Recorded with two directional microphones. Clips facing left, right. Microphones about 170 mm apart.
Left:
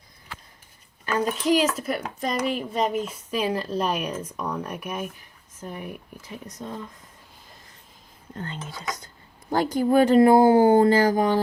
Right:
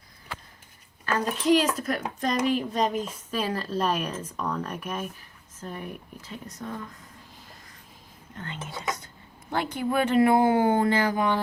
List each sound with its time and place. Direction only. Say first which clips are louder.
1.0 s a sound: left 3 dB; 15° left (ahead or behind)
1.5 s speech: right 1 dB; 5° left (ahead or behind); by 6.8 s 20° left (ahead or behind)
8.4 s speech: left 2 dB; 35° left (ahead or behind)